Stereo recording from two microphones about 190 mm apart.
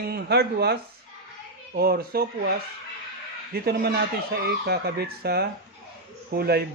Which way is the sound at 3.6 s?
55° right (ahead or behind).